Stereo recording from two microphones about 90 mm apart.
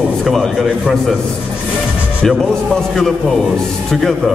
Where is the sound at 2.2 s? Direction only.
5° left (ahead or behind).